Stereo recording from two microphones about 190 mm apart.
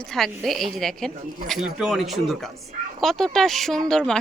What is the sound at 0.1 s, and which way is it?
A woman's voice, centre (ahead or behind).